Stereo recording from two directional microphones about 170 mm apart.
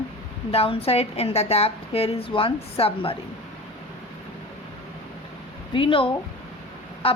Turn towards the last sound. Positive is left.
turn(degrees=35)  # may be behind; listen again after turning